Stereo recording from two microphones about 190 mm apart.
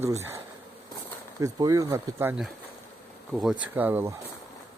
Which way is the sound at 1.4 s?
15° right (ahead or behind).